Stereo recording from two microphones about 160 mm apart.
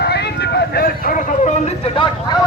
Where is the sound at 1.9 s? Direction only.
30° left (ahead or behind).